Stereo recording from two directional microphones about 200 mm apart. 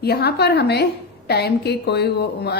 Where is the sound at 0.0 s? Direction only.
55° left (ahead or behind).